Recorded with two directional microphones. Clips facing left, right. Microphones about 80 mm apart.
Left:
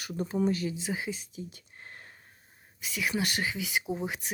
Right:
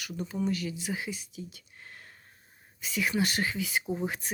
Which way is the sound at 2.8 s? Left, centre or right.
Centre.